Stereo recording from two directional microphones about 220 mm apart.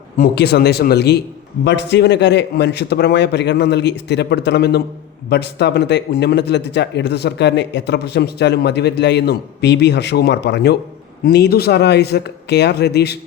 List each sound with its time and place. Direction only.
0.2 s speech: 50° left (ahead or behind)